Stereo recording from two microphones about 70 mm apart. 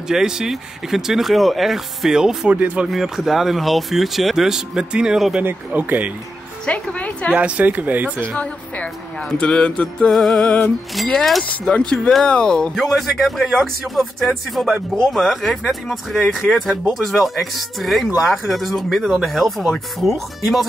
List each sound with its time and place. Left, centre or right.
0.1 s speech: centre
2.5 s speech: right
2.9 s speech: centre
5.4 s speech: right
6.6 s music: centre
7.3 s speech: centre
8.4 s speech: centre
10.0 s speech: centre
11.7 s speech: centre